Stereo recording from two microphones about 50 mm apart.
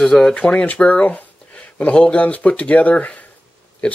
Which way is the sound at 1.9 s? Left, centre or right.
Left.